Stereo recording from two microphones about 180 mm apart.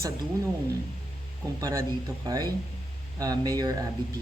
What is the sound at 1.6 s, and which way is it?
A man's voice, 15° right (ahead or behind).